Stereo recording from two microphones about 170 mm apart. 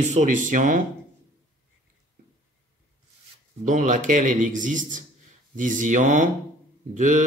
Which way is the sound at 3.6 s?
50° right (ahead or behind).